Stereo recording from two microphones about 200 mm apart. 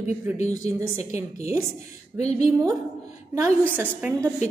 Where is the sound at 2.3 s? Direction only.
15° right (ahead or behind).